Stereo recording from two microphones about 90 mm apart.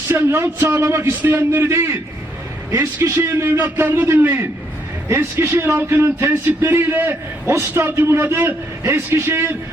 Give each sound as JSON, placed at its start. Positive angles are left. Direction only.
{"t": 0.1, "sound": "speech", "side_deg": -25}
{"t": 5.0, "sound": "speech", "side_deg": -30}